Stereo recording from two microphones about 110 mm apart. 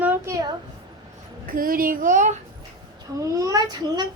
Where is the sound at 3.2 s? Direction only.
30° right (ahead or behind).